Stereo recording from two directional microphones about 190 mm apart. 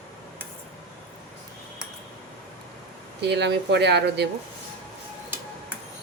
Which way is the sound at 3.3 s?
65° right (ahead or behind).